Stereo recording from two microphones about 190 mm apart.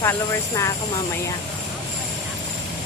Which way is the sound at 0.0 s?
15° left (ahead or behind).